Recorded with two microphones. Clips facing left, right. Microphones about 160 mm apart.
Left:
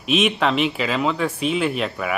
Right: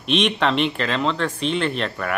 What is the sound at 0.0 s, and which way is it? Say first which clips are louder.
Speech: left 1 dB; 5° left (ahead or behind).